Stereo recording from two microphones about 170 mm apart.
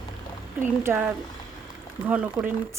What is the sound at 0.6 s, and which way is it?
Speech, 10° right (ahead or behind).